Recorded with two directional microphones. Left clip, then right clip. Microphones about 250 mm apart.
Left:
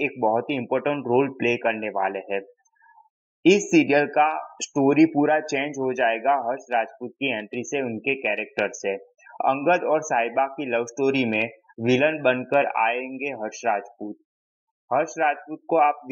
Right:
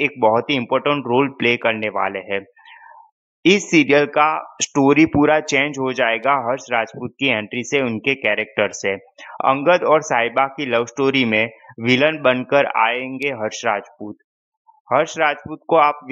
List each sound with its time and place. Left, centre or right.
0.0 s speech: right
3.7 s speech: right
14.9 s speech: right